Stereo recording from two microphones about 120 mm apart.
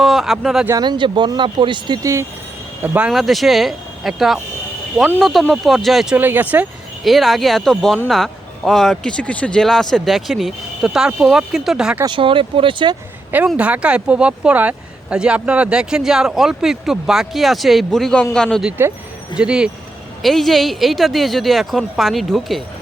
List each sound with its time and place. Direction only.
0.0 s speech: centre (ahead or behind)
0.7 s speech: 35° right (ahead or behind)
2.0 s speech: 25° right (ahead or behind)
2.8 s speech: 15° right (ahead or behind)
3.1 s speech: centre (ahead or behind)
6.1 s speech: 15° right (ahead or behind)
7.0 s speech: centre (ahead or behind)
12.0 s speech: 45° right (ahead or behind)
13.6 s speech: 10° right (ahead or behind); by 18.6 s 5° left (ahead or behind)
19.4 s speech: 5° right (ahead or behind)